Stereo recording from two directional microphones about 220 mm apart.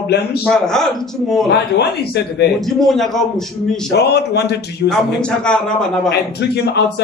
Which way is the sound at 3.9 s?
50° left (ahead or behind).